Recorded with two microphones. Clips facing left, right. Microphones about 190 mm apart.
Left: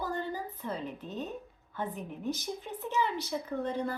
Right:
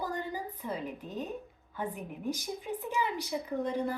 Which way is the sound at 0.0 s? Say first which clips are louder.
Left 1 dB; 15° right (ahead or behind).